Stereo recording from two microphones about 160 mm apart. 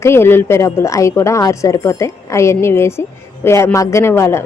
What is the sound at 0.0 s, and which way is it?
A woman's voice, 15° left (ahead or behind).